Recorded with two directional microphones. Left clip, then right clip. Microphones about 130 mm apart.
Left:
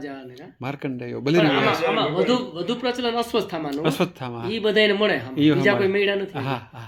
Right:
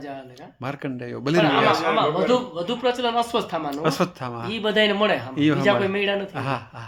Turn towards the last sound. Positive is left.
turn(degrees=-25)  # may be behind; listen again after turning